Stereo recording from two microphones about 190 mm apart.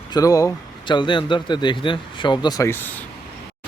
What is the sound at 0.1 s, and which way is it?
A man's voice, 20° left (ahead or behind).